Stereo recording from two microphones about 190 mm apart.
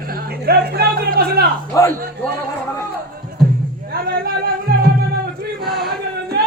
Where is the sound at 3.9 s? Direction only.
55° right (ahead or behind).